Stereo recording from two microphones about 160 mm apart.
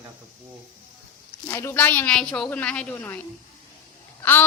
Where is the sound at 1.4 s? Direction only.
15° left (ahead or behind).